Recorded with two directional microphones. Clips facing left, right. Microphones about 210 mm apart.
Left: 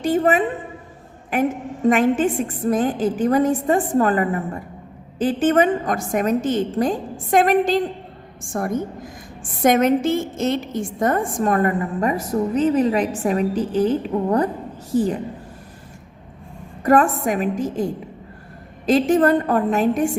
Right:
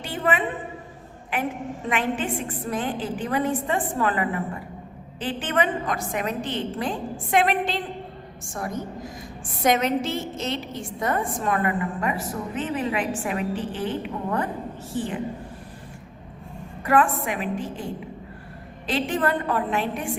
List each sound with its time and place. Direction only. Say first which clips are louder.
0.0 s a woman's voice: left 8 dB; 45° left (ahead or behind)
1.9 s a woman's voice: left 9 dB; 45° left (ahead or behind)
16.8 s a woman's voice: left 5 dB; 40° left (ahead or behind)
18.9 s a woman's voice: left 9 dB; 45° left (ahead or behind)